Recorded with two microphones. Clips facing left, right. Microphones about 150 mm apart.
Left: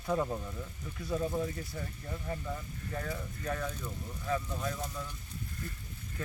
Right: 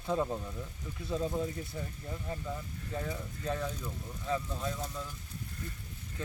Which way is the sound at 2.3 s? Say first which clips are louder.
Left 1 dB; 10° right (ahead or behind).